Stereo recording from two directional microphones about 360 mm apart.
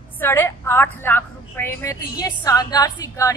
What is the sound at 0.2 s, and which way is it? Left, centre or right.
A woman's voice, centre.